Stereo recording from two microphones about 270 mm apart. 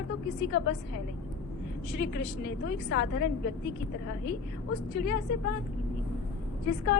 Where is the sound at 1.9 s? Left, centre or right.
Left.